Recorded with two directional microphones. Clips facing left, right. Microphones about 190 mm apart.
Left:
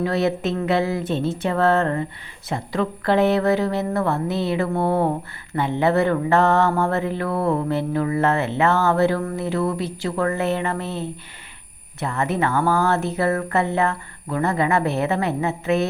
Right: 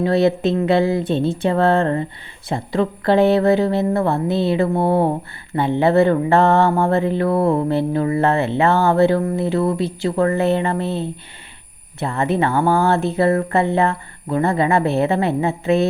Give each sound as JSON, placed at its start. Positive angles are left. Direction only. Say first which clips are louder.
{"t": 0.0, "sound": "mantra", "louder": "right 5 dB", "side_deg": -30}